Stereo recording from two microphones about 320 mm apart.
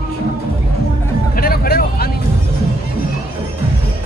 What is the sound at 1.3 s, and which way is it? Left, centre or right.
Hubbub, left.